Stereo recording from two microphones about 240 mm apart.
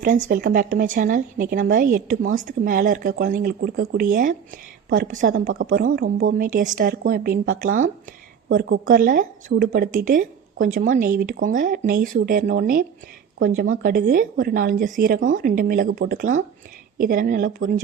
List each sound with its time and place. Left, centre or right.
0.3 s speech: right
8.9 s speech: right